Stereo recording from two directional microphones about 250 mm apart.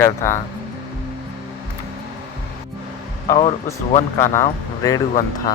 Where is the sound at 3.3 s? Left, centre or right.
Left.